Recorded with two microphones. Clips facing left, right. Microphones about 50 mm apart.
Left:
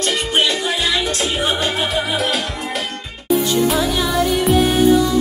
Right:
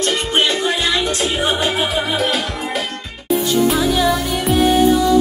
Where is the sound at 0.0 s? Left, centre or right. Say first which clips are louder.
Right 1 dB; centre.